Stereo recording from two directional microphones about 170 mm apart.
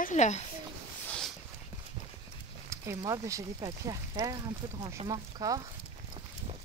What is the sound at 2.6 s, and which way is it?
Speech, 20° right (ahead or behind).